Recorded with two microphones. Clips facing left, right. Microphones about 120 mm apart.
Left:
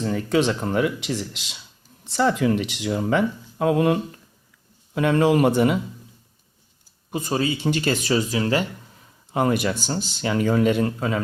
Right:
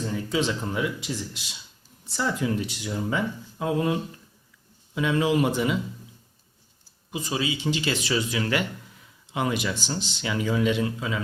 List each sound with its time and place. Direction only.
0.1 s speech: 65° left (ahead or behind)
4.9 s speech: 55° left (ahead or behind)
7.1 s speech: 50° left (ahead or behind); by 8.6 s 30° left (ahead or behind)
9.3 s speech: 45° left (ahead or behind)